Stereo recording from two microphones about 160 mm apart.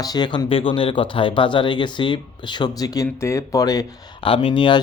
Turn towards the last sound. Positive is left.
turn(degrees=30)  # may be behind; listen again after turning